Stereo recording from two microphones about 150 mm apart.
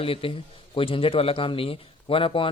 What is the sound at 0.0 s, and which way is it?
Speech, 35° left (ahead or behind).